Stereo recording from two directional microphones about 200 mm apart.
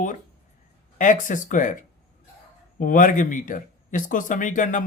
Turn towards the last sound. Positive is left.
turn(degrees=40)  # may be behind; listen again after turning